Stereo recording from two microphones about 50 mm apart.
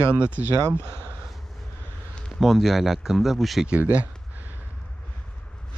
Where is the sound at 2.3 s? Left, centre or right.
Centre.